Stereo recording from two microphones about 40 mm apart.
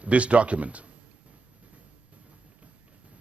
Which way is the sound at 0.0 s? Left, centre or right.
Right.